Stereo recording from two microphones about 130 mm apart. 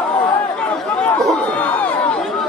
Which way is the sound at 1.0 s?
10° left (ahead or behind).